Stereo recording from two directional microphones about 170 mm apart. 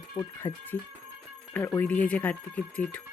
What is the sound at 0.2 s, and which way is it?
Speech, 15° left (ahead or behind).